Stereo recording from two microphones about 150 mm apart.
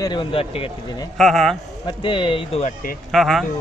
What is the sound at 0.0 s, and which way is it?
Speech, 35° left (ahead or behind).